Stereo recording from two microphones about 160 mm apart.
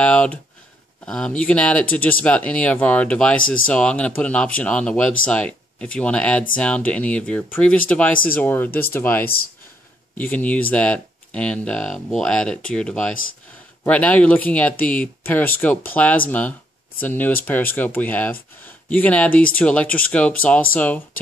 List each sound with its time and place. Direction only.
0.0 s speech: 5° left (ahead or behind)